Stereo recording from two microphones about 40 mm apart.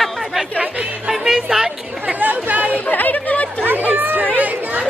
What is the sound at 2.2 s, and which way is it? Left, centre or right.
Speech, right.